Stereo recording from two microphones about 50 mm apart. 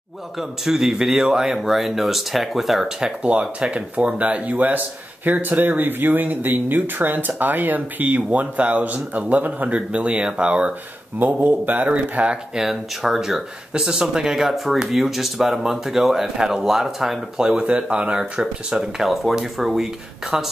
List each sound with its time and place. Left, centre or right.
0.4 s speech: centre
3.0 s speech: centre
11.1 s speech: right
12.5 s speech: centre; by 18.2 s right
18.4 s speech: centre